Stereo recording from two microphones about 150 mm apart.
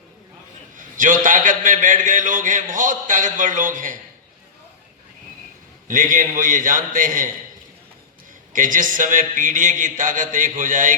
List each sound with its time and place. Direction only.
0.8 s a man's voice: 60° right (ahead or behind)
5.9 s a man's voice: 60° right (ahead or behind)
8.5 s a man's voice: 60° right (ahead or behind)